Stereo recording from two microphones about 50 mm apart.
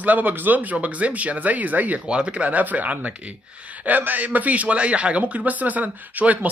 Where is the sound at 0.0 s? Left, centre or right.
Right.